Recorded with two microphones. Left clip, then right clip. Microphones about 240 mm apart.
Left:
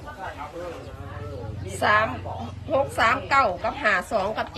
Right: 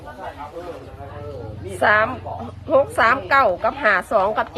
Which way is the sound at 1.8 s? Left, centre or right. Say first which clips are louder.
Right 4 dB; centre.